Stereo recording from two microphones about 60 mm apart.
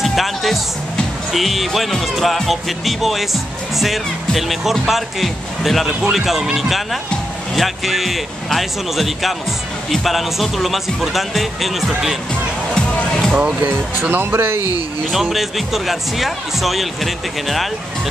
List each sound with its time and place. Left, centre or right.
0.0 s music: centre
1.3 s speech: centre
12.7 s music: centre
13.3 s speech: centre
14.0 s speech: right
15.1 s speech: centre